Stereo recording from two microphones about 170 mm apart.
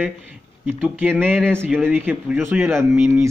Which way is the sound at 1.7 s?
10° right (ahead or behind).